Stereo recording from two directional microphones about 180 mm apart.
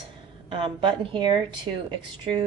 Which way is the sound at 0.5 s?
30° right (ahead or behind).